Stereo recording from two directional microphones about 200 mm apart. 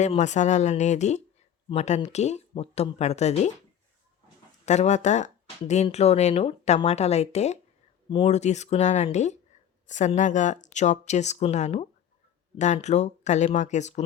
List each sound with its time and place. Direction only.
0.0 s speech: 35° left (ahead or behind)
4.6 s speech: 35° left (ahead or behind)